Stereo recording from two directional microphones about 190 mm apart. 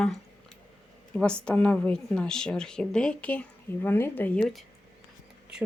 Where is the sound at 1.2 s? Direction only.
5° left (ahead or behind).